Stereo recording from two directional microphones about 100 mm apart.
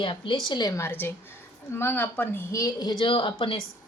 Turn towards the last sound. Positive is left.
turn(degrees=65)  # may be behind; listen again after turning